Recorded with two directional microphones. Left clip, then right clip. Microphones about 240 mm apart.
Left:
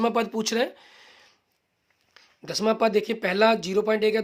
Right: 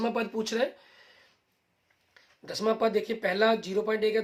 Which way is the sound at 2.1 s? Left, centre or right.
Left.